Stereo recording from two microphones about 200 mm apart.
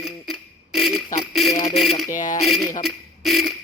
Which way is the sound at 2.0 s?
40° left (ahead or behind).